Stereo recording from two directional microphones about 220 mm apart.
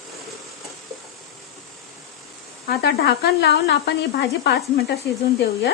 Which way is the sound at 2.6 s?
45° left (ahead or behind).